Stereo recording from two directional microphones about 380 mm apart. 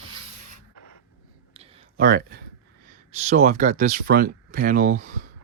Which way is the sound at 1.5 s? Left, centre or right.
Right.